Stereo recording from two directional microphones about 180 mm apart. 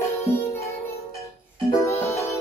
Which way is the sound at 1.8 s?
15° left (ahead or behind).